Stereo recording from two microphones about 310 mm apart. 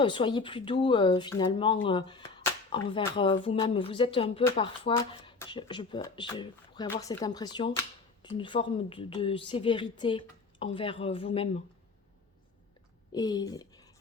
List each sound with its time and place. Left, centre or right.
0.0 s speech: centre
13.1 s speech: centre